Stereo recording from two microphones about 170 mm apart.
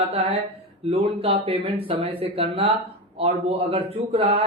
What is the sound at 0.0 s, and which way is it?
Speech, 35° right (ahead or behind).